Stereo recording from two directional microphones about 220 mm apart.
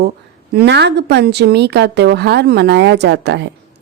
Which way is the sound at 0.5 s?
50° right (ahead or behind).